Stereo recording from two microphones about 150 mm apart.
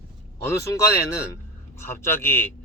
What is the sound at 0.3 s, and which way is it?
Speech, 20° left (ahead or behind).